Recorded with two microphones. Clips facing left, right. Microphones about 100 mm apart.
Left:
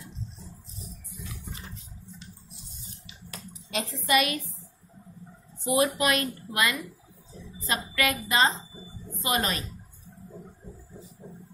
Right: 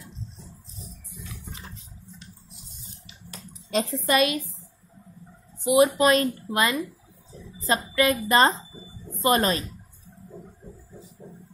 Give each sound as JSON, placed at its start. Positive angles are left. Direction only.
{"t": 3.7, "sound": "speech", "side_deg": -40}
{"t": 5.8, "sound": "speech", "side_deg": -30}